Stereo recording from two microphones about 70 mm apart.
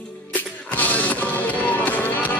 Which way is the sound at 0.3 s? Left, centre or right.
Left.